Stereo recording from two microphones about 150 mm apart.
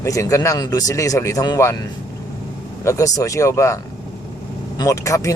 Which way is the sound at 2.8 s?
20° left (ahead or behind).